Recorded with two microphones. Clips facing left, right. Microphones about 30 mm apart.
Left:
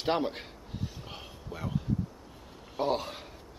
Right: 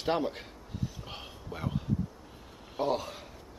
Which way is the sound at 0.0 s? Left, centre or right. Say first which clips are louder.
Left 1 dB; left.